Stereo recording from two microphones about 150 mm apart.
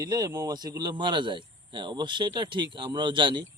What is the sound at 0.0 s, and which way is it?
Speech, 25° right (ahead or behind).